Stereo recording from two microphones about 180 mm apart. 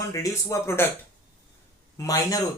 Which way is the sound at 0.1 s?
20° left (ahead or behind).